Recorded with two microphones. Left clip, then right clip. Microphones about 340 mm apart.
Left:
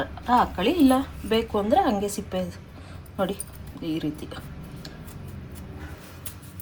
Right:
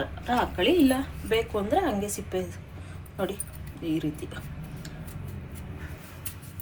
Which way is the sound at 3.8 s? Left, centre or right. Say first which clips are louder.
Even; left.